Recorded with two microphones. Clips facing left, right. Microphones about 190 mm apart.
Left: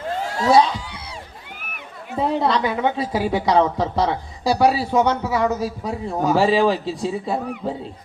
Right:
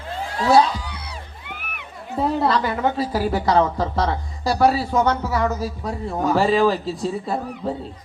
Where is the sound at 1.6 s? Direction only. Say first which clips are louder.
Even; 45° left (ahead or behind).